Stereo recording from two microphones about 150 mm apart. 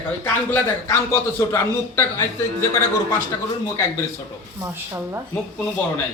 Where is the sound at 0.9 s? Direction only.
15° left (ahead or behind).